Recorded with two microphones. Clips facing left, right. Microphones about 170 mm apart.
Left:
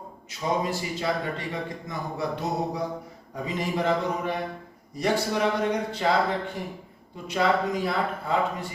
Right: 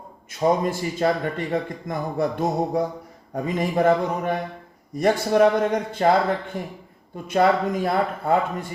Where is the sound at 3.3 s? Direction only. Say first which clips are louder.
Right 5 dB; 50° right (ahead or behind).